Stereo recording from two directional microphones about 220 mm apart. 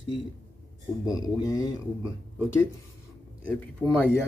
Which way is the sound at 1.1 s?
15° left (ahead or behind).